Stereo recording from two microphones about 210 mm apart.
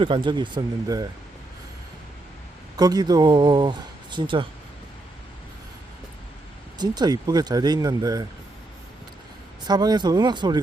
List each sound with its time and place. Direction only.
0.0 s speech: 25° right (ahead or behind)
2.7 s speech: 20° right (ahead or behind)
6.7 s speech: 20° right (ahead or behind)
9.6 s speech: 20° right (ahead or behind)